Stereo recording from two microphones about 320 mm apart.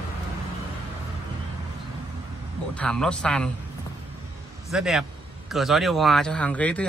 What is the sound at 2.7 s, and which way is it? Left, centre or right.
Speech, centre.